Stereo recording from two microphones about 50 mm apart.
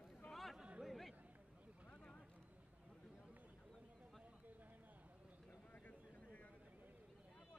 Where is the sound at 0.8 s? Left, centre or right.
Centre.